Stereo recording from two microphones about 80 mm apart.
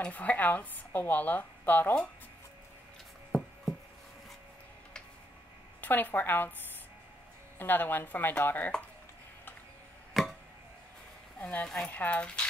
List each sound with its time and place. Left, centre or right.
0.0 s speech: centre
5.8 s a woman's voice: left
7.5 s speech: left
10.1 s a sound: centre
11.3 s speech: centre